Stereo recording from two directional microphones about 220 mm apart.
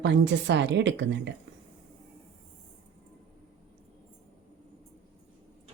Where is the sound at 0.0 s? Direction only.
55° right (ahead or behind).